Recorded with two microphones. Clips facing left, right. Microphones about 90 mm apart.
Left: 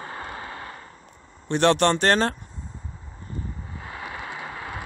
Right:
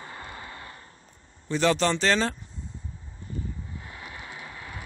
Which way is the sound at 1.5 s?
60° left (ahead or behind).